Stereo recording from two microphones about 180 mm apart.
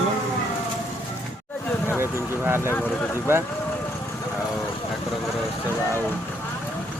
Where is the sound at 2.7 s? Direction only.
15° left (ahead or behind).